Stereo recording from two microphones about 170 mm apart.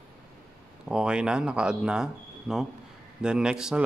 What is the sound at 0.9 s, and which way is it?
A man's voice, 5° right (ahead or behind).